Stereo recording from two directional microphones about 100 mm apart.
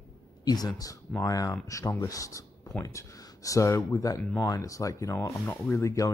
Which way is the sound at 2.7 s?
10° left (ahead or behind).